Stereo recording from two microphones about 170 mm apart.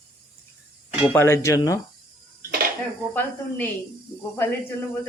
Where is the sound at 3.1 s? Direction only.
10° left (ahead or behind).